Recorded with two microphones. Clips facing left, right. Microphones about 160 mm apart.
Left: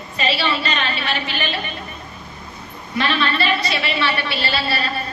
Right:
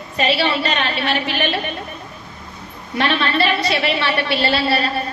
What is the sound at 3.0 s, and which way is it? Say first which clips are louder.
A woman's voice: right 2 dB; 65° right (ahead or behind).